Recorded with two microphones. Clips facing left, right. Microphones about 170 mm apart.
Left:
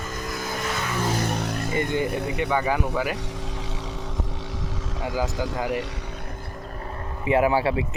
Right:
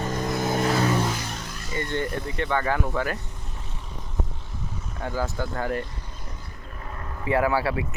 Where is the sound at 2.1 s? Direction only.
65° left (ahead or behind).